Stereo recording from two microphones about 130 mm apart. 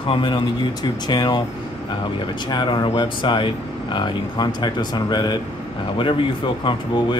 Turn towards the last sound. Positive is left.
turn(degrees=40)  # may be behind; listen again after turning